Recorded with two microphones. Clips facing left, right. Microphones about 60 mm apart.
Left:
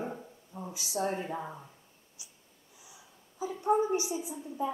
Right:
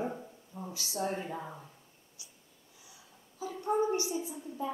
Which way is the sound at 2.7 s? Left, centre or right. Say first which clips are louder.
Left 2 dB; centre.